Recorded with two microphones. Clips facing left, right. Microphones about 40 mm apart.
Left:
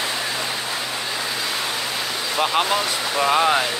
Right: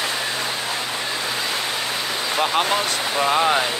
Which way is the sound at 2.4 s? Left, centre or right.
Centre.